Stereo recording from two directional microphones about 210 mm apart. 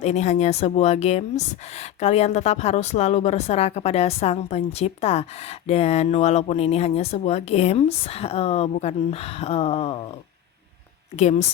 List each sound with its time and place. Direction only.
0.0 s speech: 30° left (ahead or behind)
11.2 s speech: 35° left (ahead or behind)